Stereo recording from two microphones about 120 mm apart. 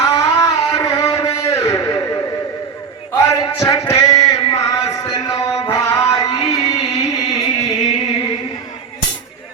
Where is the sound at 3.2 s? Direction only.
25° left (ahead or behind).